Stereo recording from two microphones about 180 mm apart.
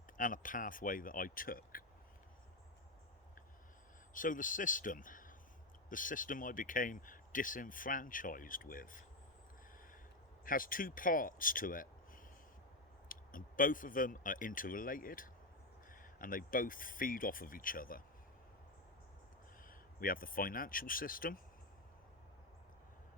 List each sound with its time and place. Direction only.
0.2 s speech: 50° left (ahead or behind)
4.1 s speech: 50° left (ahead or behind)
10.4 s speech: 50° left (ahead or behind)
19.6 s speech: 50° left (ahead or behind)